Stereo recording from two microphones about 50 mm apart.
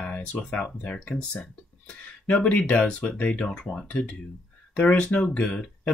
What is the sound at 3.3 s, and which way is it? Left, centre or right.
Speech, left.